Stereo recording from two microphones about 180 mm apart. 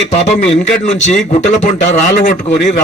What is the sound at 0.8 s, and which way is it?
A man's voice, 40° left (ahead or behind).